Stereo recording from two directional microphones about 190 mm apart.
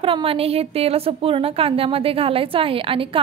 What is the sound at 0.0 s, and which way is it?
A woman's voice, 30° right (ahead or behind).